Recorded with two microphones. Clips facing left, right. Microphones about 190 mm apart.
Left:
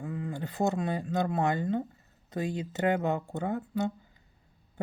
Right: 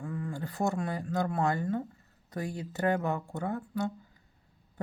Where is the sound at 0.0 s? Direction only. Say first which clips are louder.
Left 1 dB; 20° left (ahead or behind).